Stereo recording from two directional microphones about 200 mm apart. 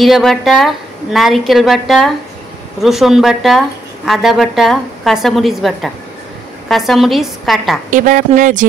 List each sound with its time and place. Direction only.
0.0 s speech: centre (ahead or behind)
7.9 s speech: 40° right (ahead or behind)